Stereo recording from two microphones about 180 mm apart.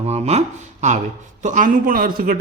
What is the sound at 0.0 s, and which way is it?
A man's voice, 35° right (ahead or behind).